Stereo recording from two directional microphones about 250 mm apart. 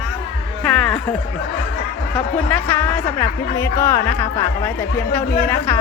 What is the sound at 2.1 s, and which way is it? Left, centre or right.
Speech, centre.